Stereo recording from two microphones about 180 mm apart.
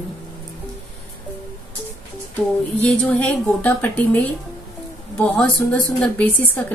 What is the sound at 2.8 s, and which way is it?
A woman's voice, 5° left (ahead or behind).